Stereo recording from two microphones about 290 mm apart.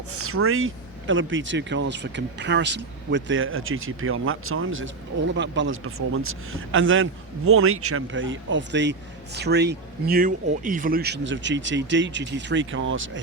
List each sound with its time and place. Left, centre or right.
0.1 s a man's voice: right